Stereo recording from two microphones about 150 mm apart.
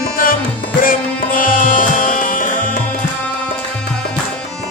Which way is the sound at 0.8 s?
70° left (ahead or behind).